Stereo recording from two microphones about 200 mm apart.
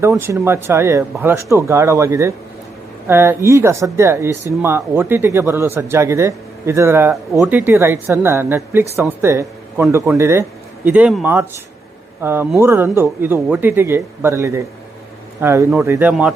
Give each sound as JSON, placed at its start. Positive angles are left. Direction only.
{"t": 0.1, "sound": "speech", "side_deg": -10}